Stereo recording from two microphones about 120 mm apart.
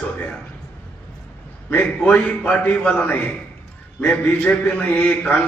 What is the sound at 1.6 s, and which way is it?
A man's voice, 15° left (ahead or behind).